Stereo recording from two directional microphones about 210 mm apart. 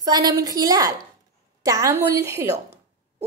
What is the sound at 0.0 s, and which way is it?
A woman's voice, 15° right (ahead or behind).